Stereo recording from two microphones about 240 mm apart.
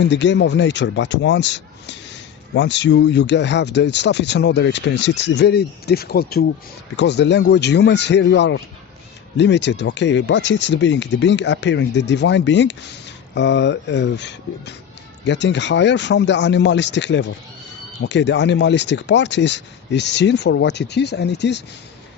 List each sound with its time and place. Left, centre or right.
0.0 s speech: left